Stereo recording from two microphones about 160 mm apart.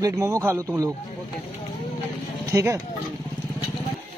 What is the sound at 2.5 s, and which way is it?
Speech, 20° right (ahead or behind).